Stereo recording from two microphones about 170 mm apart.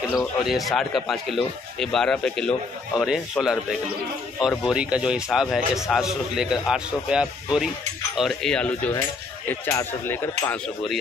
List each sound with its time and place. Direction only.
0.2 s a man's voice: centre (ahead or behind)